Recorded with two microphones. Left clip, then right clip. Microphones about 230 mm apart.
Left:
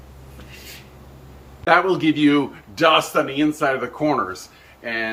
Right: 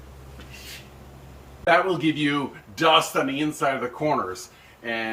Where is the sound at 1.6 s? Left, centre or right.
Centre.